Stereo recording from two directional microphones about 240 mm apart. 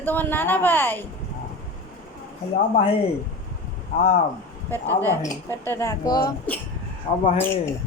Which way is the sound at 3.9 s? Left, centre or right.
Left.